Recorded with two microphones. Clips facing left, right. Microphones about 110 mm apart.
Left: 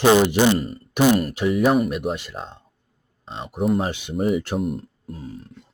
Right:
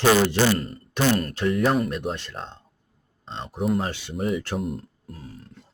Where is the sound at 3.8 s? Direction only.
15° left (ahead or behind).